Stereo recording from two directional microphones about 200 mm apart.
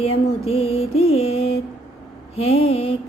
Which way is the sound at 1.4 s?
30° left (ahead or behind).